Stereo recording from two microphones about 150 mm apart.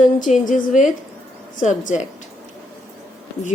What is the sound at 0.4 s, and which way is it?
A woman's voice, 55° left (ahead or behind).